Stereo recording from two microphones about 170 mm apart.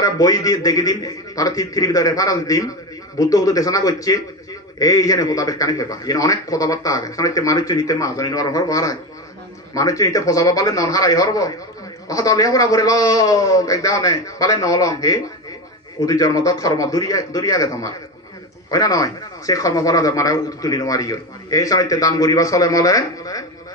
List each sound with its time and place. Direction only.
0.0 s speech: 20° left (ahead or behind)